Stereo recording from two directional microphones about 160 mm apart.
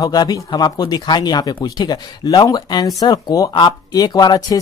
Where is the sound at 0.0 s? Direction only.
25° left (ahead or behind).